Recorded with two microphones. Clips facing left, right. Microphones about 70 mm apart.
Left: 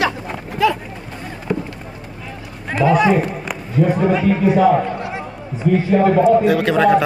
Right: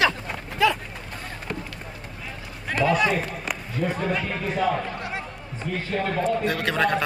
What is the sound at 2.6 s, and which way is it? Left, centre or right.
A man's voice, centre.